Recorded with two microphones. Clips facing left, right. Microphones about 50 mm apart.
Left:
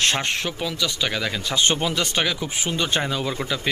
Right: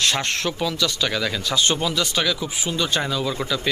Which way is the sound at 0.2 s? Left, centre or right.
Centre.